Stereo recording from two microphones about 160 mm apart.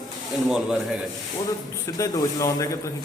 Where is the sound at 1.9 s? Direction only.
20° left (ahead or behind).